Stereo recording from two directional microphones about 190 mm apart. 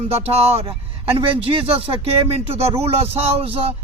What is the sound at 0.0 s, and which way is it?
Speech, 30° right (ahead or behind).